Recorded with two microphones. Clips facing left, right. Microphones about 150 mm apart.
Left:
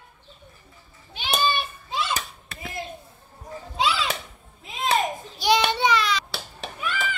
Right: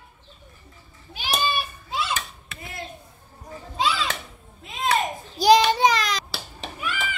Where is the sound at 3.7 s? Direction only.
Centre (ahead or behind).